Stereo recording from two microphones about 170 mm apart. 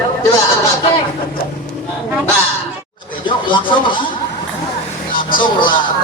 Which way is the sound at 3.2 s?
30° left (ahead or behind).